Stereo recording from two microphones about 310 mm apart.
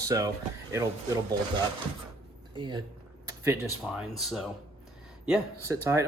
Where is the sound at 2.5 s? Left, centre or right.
Centre.